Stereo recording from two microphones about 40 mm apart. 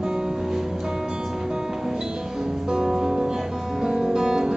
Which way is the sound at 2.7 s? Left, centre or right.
Centre.